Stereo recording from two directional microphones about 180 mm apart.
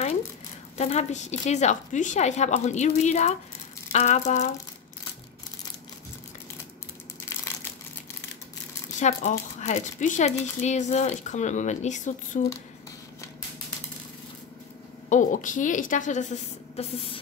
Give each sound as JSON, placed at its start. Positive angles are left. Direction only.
{"t": 0.7, "sound": "speech", "side_deg": 35}
{"t": 9.0, "sound": "speech", "side_deg": 40}
{"t": 15.0, "sound": "a woman's voice", "side_deg": 45}